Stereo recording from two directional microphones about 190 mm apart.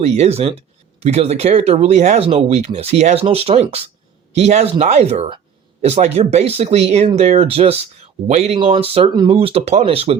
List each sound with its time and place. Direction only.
0.0 s speech: 35° right (ahead or behind)